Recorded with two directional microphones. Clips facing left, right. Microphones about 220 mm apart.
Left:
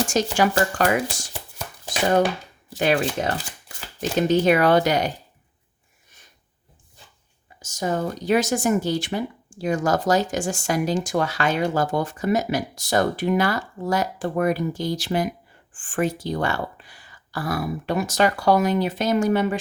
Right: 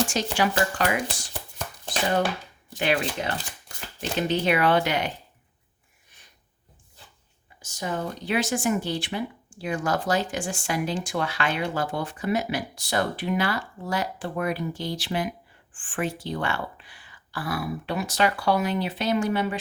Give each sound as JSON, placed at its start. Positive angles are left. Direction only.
{"t": 0.1, "sound": "speech", "side_deg": 45}
{"t": 2.7, "sound": "speech", "side_deg": 45}
{"t": 7.6, "sound": "speech", "side_deg": 45}